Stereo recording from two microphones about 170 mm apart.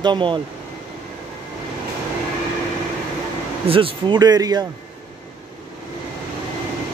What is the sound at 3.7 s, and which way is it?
Speech, 30° right (ahead or behind).